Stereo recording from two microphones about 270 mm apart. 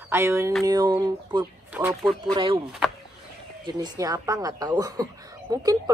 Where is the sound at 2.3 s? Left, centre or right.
Centre.